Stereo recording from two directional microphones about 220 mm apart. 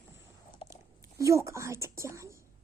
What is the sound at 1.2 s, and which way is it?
Speech, 15° right (ahead or behind).